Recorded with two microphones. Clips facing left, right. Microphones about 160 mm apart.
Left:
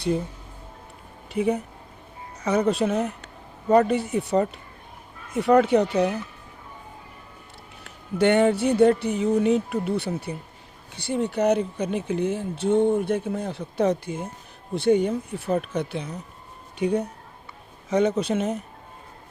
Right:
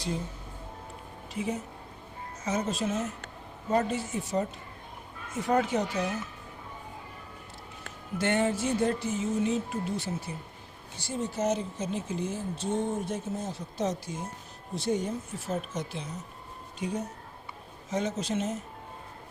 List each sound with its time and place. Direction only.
1.3 s speech: 60° left (ahead or behind)
8.2 s speech: 70° left (ahead or behind)